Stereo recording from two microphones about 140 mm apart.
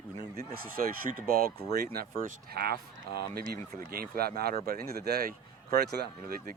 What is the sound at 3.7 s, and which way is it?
Speech, 90° right.